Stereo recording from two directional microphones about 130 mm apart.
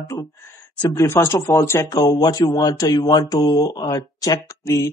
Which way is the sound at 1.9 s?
30° left (ahead or behind).